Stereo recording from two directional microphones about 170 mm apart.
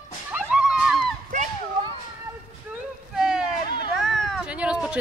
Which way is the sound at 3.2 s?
5° right (ahead or behind).